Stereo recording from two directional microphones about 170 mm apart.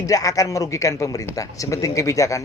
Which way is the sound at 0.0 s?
20° left (ahead or behind).